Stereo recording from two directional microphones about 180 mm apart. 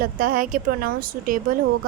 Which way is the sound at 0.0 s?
50° right (ahead or behind).